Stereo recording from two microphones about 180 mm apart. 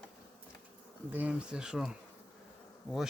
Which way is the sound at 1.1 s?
10° right (ahead or behind).